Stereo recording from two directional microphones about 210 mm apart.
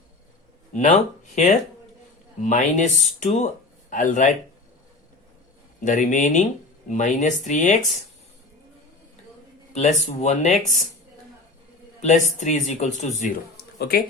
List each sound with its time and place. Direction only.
0.7 s speech: 35° left (ahead or behind)
2.4 s speech: 35° left (ahead or behind)
5.8 s speech: 35° left (ahead or behind)
9.7 s speech: 30° left (ahead or behind)
12.0 s speech: 35° left (ahead or behind)
13.7 s speech: 45° left (ahead or behind)